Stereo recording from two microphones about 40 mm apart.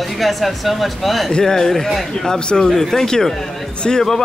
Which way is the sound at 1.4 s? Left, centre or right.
Centre.